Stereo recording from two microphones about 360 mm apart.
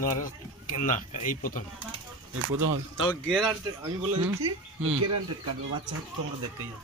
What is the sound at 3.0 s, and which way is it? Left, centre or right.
Speech, centre.